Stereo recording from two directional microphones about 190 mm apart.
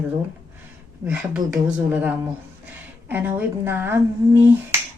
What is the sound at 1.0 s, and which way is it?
A woman's voice, 5° right (ahead or behind).